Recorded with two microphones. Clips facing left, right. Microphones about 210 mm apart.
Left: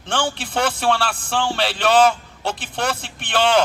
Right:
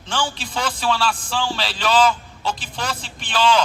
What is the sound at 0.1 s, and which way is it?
A man's voice, 60° left (ahead or behind).